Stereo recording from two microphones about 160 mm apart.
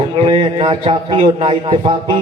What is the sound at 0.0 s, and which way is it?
A man's voice, 30° right (ahead or behind).